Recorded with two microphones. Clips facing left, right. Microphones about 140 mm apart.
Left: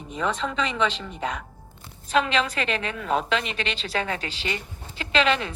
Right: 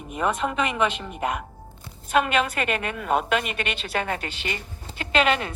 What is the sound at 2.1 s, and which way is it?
A woman's voice, 55° right (ahead or behind).